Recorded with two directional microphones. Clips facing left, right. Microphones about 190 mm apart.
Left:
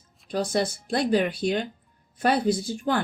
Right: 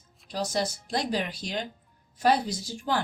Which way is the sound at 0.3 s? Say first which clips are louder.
Left 4 dB; 55° left (ahead or behind).